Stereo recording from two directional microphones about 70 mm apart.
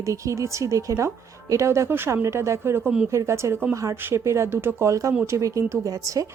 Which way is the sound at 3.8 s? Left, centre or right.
Right.